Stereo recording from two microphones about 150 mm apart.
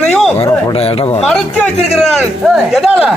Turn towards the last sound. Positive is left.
turn(degrees=-5)  # may be behind; listen again after turning